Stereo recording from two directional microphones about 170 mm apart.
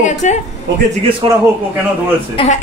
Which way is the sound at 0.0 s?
45° left (ahead or behind).